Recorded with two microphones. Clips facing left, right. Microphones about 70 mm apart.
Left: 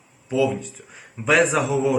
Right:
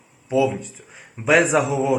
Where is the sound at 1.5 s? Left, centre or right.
Centre.